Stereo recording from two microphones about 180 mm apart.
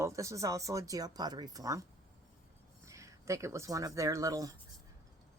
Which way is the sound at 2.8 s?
15° right (ahead or behind).